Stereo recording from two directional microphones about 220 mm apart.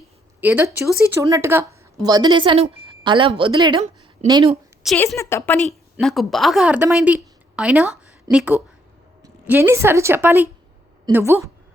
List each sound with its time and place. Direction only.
0.4 s speech: 10° right (ahead or behind)
4.9 s a woman's voice: 15° left (ahead or behind)
5.6 s a woman's voice: centre (ahead or behind)